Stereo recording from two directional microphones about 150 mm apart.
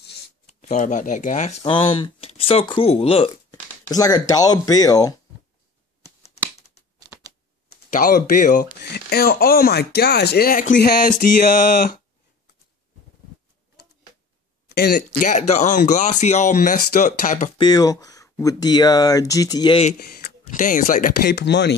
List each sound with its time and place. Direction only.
0.5 s speech: 50° left (ahead or behind)
1.6 s speech: 35° left (ahead or behind)
3.9 s speech: 25° left (ahead or behind)
7.7 s speech: 60° left (ahead or behind)
8.8 s speech: 90° left; by 11.3 s 65° left (ahead or behind)
14.7 s speech: 90° left; by 17.5 s 60° left (ahead or behind)
17.6 s speech: 25° left (ahead or behind)
20.5 s speech: 60° left (ahead or behind)